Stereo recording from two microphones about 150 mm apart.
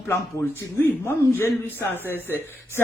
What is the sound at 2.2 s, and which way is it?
Speech, 15° right (ahead or behind).